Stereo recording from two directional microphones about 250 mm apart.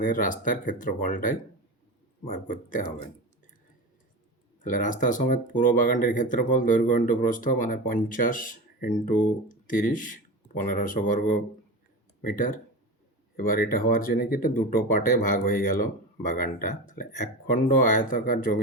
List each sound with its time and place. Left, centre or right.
0.0 s speech: left
4.6 s speech: left